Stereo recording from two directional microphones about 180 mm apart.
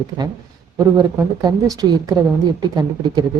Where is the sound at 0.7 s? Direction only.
20° right (ahead or behind).